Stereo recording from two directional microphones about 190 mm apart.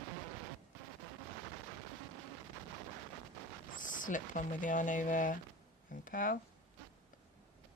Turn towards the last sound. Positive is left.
turn(degrees=45)  # may be behind; listen again after turning